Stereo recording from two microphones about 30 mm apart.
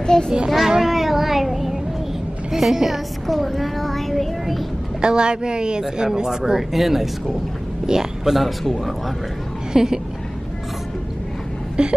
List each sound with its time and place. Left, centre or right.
0.0 s a child's voice: left
0.7 s child singing: centre
2.5 s a child's voice: centre
5.0 s a woman's voice: right
6.7 s a child's voice: centre
7.8 s a man's voice: centre
8.4 s a child's voice: centre
9.7 s a woman's voice: centre
11.8 s a sound: right